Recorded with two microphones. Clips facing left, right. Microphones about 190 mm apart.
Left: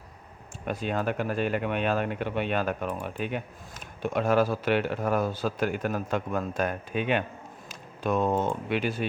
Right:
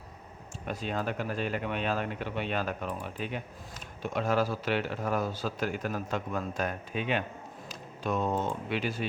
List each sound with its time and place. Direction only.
0.7 s speech: 55° left (ahead or behind)